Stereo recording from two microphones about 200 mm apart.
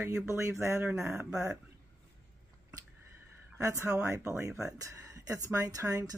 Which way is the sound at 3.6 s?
15° right (ahead or behind).